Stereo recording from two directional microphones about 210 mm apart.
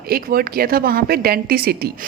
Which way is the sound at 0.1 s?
45° right (ahead or behind).